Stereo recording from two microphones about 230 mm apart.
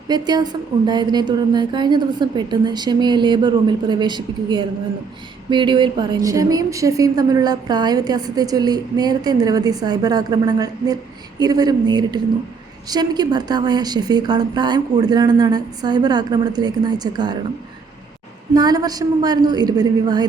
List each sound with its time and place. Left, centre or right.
0.1 s a woman's voice: centre
18.5 s a woman's voice: centre